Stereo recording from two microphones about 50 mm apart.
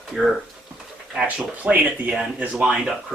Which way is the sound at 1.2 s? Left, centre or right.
Right.